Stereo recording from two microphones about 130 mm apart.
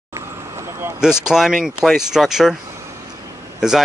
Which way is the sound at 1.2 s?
5° right (ahead or behind).